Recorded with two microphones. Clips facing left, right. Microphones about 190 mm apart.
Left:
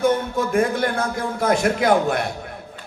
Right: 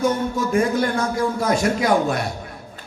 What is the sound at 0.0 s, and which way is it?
A man's voice, 55° left (ahead or behind).